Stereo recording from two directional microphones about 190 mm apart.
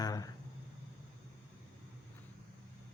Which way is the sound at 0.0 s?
20° left (ahead or behind).